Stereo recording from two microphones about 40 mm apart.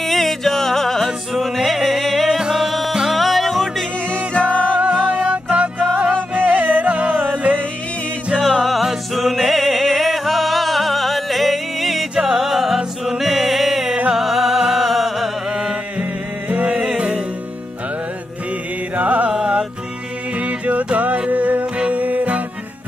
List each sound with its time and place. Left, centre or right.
0.0 s music: centre
2.2 s music: centre
4.1 s music: right
5.5 s music: right
8.4 s music: centre
15.5 s a sound: centre
16.0 s music: right
18.9 s music: right
20.3 s music: right